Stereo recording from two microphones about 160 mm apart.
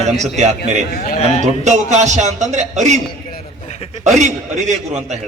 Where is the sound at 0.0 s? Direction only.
45° right (ahead or behind).